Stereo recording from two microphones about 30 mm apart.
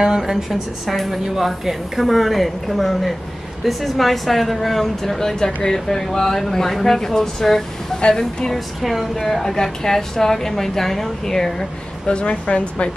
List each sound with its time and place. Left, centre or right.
0.3 s a woman's voice: centre
5.4 s a woman's voice: left
8.8 s a woman's voice: centre
9.1 s a woman's voice: centre
12.1 s a woman's voice: left